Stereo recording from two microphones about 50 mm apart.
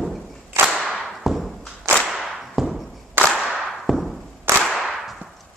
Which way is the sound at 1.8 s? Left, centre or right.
Right.